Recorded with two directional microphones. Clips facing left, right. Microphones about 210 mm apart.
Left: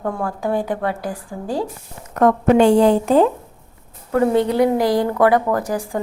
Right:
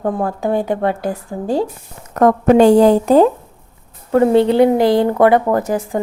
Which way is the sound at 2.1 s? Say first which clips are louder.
Right 3 dB; 40° right (ahead or behind).